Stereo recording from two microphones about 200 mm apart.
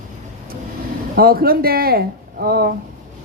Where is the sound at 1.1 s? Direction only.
50° right (ahead or behind).